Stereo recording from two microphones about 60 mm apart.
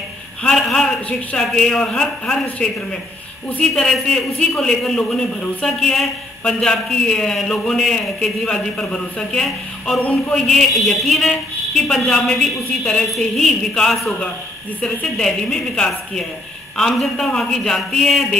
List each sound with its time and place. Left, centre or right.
0.4 s a man's voice: centre
3.7 s a man's voice: centre
9.9 s a sound: centre
10.3 s a man's voice: centre
15.2 s a man's voice: centre